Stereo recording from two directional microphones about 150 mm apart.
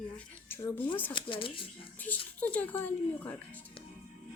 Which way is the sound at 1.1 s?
35° left (ahead or behind).